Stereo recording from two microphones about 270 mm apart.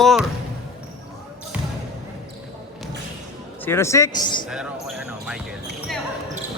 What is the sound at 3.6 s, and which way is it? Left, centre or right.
Speech, centre.